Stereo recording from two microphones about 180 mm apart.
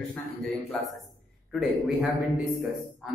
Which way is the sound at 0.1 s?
Centre (ahead or behind).